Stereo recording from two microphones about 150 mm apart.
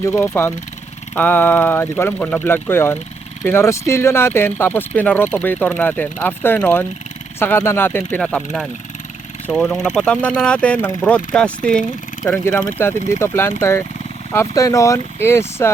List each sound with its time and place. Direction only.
0.0 s speech: 20° left (ahead or behind)
9.5 s speech: 5° left (ahead or behind)